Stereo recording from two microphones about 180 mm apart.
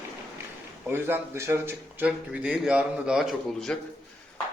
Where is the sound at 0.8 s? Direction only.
10° right (ahead or behind).